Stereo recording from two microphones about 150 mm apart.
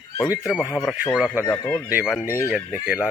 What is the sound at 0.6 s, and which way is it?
Speech, 25° left (ahead or behind).